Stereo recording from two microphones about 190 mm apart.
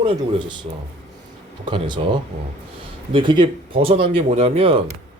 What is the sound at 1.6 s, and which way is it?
Speech, 25° right (ahead or behind).